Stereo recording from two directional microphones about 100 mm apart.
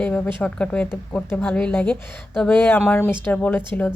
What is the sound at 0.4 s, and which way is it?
Speech, 10° left (ahead or behind).